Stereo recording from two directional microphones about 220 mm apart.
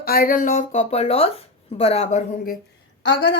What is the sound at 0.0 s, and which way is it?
Speech, 40° left (ahead or behind).